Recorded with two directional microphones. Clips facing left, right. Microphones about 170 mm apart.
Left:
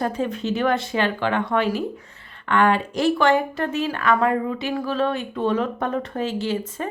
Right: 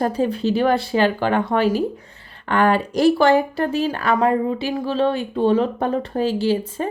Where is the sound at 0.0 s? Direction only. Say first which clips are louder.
Right 4 dB; 35° right (ahead or behind).